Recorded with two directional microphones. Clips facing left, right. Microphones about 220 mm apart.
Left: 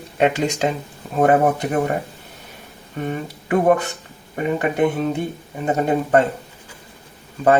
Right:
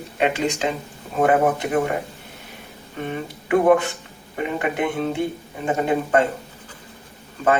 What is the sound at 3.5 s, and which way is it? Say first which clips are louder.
Speech: right 1 dB; 40° left (ahead or behind).